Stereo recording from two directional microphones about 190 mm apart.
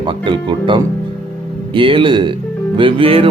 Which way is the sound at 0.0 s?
25° right (ahead or behind).